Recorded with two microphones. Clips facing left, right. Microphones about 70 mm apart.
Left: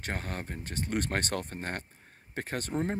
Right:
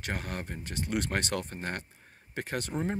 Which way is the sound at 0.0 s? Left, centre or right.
Left.